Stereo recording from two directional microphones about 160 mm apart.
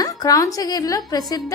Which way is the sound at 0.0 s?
20° left (ahead or behind).